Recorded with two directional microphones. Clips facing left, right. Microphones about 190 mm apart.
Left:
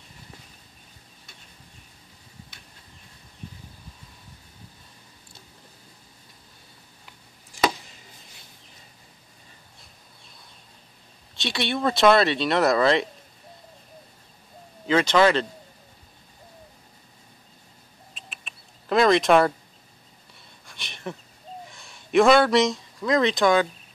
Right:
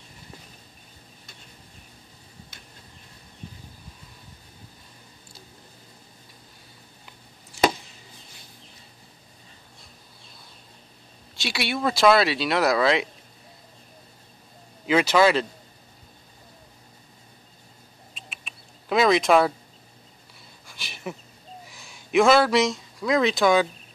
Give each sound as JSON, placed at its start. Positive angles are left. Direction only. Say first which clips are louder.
{"t": 11.4, "sound": "speech", "louder": "left 1 dB", "side_deg": -5}
{"t": 14.9, "sound": "speech", "louder": "even", "side_deg": -10}
{"t": 18.1, "sound": "a sound", "louder": "even", "side_deg": 0}
{"t": 20.6, "sound": "speech", "louder": "even", "side_deg": 0}